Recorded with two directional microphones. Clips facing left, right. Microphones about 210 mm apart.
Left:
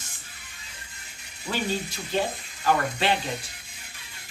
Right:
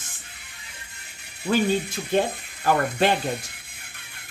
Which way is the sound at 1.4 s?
55° right (ahead or behind).